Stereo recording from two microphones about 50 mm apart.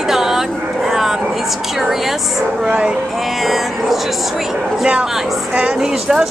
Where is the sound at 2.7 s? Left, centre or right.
Right.